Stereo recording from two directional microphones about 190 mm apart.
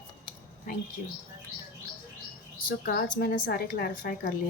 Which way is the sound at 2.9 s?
50° left (ahead or behind).